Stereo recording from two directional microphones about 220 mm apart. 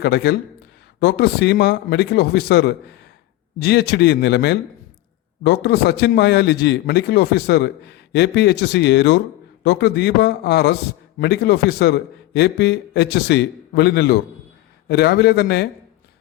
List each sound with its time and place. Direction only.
0.0 s a man's voice: 50° left (ahead or behind)